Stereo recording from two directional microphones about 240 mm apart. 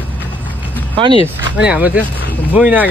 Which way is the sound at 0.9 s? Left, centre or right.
Right.